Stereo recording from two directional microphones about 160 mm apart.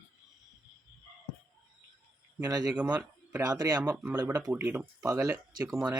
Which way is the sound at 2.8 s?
10° right (ahead or behind).